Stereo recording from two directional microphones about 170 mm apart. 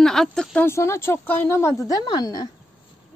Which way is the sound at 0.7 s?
15° left (ahead or behind).